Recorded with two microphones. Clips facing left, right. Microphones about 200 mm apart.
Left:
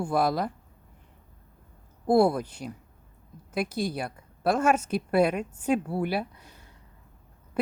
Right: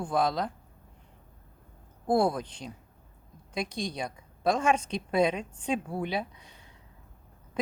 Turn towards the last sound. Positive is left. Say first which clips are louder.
# left 2 dB
turn(degrees=10)  # may be behind; listen again after turning